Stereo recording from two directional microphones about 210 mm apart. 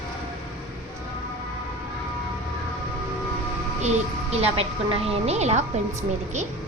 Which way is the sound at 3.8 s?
30° right (ahead or behind).